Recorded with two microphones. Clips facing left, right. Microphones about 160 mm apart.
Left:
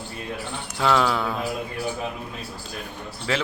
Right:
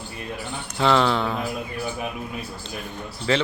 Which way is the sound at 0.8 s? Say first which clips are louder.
Right 2 dB; centre (ahead or behind).